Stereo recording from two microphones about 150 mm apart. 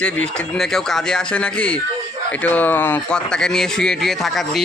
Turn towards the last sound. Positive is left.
turn(degrees=0)  # may be behind; listen again after turning